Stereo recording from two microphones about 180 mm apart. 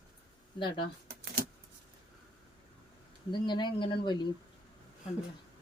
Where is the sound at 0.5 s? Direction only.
25° left (ahead or behind).